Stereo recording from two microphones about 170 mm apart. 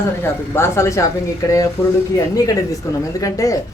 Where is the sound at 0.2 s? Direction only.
15° left (ahead or behind).